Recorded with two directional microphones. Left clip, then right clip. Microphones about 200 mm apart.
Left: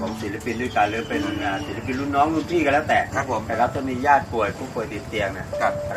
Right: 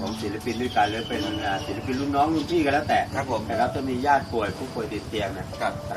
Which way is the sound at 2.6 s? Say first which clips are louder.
Left 5 dB; 15° left (ahead or behind).